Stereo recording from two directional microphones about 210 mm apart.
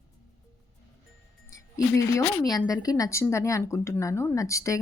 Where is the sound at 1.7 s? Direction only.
15° left (ahead or behind).